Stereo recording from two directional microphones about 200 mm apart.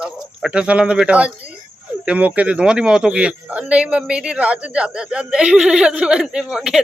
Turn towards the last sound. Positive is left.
turn(degrees=0)  # may be behind; listen again after turning